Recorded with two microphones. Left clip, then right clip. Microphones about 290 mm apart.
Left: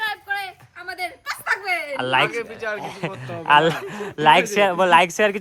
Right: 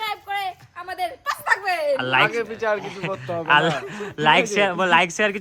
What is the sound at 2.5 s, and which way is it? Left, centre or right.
Speech, right.